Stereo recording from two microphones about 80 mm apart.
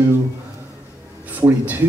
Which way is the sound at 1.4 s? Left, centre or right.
Right.